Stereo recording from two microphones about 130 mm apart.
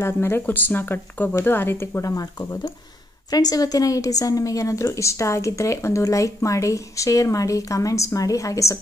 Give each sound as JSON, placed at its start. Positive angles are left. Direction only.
{"t": 0.0, "sound": "a woman's voice", "side_deg": 15}